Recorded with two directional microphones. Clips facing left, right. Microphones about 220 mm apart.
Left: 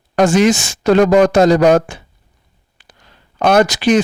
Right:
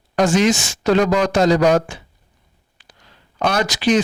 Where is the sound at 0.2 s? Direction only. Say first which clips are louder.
Left 4 dB; 55° left (ahead or behind).